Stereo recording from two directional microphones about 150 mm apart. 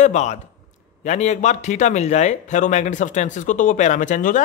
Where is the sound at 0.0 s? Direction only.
50° left (ahead or behind).